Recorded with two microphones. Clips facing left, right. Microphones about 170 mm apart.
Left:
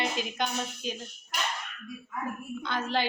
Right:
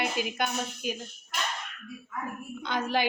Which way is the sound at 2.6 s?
15° right (ahead or behind).